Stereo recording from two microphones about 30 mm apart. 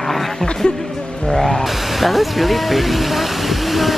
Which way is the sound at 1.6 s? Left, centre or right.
Centre.